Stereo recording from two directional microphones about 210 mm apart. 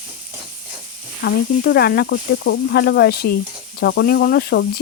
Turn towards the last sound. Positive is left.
turn(degrees=50)  # may be behind; listen again after turning